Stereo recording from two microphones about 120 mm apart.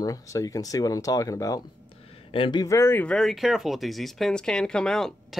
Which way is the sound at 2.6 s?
25° left (ahead or behind).